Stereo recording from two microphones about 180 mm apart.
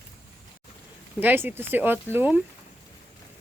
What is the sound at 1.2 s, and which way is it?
Speech, 10° right (ahead or behind).